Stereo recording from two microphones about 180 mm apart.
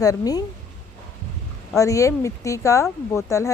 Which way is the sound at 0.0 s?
20° left (ahead or behind).